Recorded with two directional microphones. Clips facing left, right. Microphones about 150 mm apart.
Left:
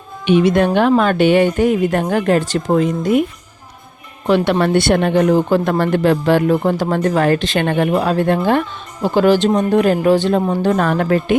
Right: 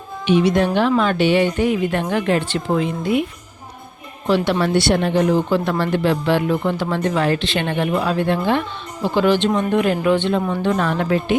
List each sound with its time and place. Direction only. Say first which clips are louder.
0.3 s speech: left 3 dB; 55° left (ahead or behind)
4.6 s speech: left 3 dB; 55° left (ahead or behind)